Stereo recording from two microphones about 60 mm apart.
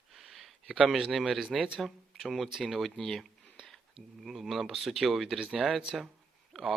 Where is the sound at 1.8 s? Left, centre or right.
Centre.